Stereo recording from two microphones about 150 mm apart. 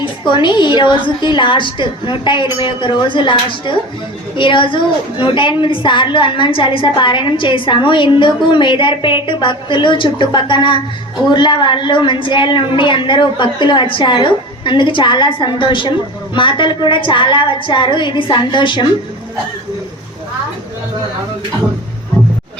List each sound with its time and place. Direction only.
0.0 s a woman's voice: 30° left (ahead or behind)